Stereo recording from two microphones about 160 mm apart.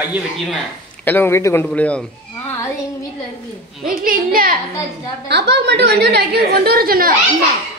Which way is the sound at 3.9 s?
65° right (ahead or behind).